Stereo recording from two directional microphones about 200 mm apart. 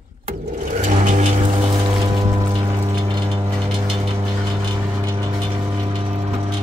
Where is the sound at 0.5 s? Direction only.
40° right (ahead or behind).